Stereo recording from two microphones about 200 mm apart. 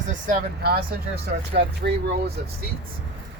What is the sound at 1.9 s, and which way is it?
Speech, 60° right (ahead or behind).